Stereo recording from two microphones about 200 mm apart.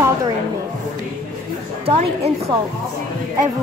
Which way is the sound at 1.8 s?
30° right (ahead or behind).